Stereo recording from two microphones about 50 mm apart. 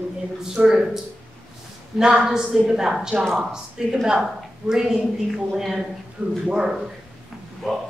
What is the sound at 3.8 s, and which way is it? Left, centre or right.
A woman's voice, centre.